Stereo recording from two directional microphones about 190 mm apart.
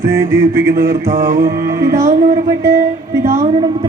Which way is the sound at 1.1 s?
45° right (ahead or behind).